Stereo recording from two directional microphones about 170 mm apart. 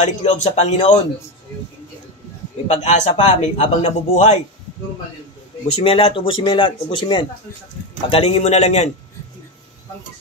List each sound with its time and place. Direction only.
0.0 s a man's voice: 40° left (ahead or behind)
2.7 s a man's voice: 40° left (ahead or behind)
5.7 s a man's voice: 35° left (ahead or behind)